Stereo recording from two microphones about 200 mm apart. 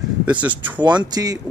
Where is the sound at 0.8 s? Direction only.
20° right (ahead or behind).